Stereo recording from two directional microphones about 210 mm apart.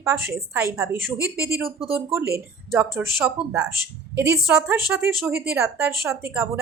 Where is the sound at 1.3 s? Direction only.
50° right (ahead or behind).